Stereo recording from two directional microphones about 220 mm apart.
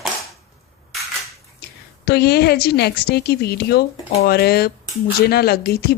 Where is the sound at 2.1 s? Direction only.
50° left (ahead or behind).